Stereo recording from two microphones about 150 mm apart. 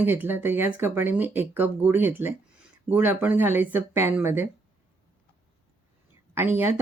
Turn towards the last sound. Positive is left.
turn(degrees=-15)  # may be behind; listen again after turning